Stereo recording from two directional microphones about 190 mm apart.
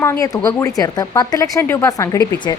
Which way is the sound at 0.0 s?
15° left (ahead or behind).